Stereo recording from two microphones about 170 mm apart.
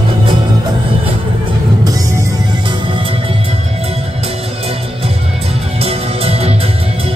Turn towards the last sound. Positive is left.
turn(degrees=-35)  # may be behind; listen again after turning